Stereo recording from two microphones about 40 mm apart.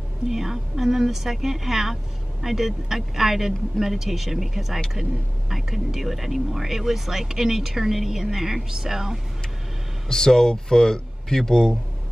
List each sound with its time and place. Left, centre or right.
0.3 s speech: centre
10.0 s speech: centre